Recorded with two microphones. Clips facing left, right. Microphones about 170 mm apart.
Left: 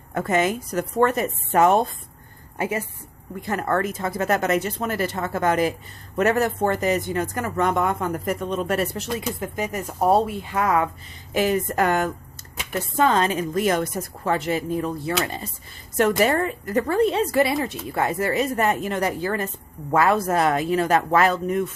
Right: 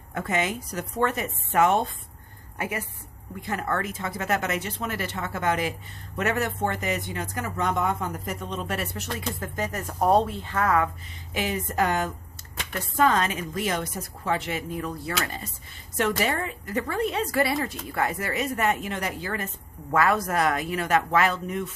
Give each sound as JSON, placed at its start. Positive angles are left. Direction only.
{"t": 0.1, "sound": "speech", "side_deg": 45}
{"t": 2.6, "sound": "speech", "side_deg": 25}
{"t": 3.4, "sound": "speech", "side_deg": 45}
{"t": 9.0, "sound": "speech", "side_deg": 10}
{"t": 11.3, "sound": "speech", "side_deg": 50}
{"t": 12.7, "sound": "speech", "side_deg": 25}
{"t": 13.5, "sound": "speech", "side_deg": 50}
{"t": 16.0, "sound": "speech", "side_deg": 45}
{"t": 19.9, "sound": "speech", "side_deg": 25}